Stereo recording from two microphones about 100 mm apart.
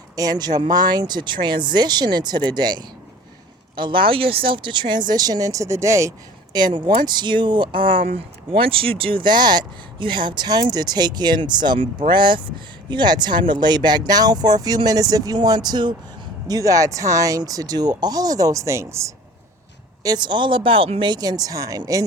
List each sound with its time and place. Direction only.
0.2 s speech: 40° right (ahead or behind)
16.5 s speech: 35° right (ahead or behind)
20.0 s speech: 45° right (ahead or behind)